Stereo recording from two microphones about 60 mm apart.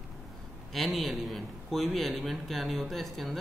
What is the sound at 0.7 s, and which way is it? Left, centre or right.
A man's voice, centre.